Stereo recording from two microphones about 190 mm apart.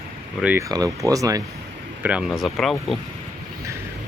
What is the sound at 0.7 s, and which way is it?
Speech, 20° right (ahead or behind).